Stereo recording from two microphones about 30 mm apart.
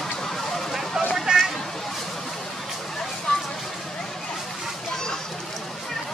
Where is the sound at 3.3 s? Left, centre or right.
Left.